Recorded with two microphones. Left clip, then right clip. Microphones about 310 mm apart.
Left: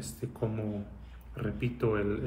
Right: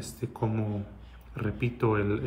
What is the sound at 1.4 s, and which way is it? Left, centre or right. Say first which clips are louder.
Speech: right 3 dB; centre.